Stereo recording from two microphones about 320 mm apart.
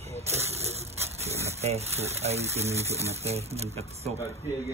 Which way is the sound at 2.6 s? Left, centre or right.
Centre.